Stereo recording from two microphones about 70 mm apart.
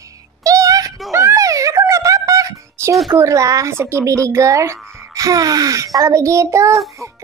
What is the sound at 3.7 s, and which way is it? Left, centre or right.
A woman's voice, right.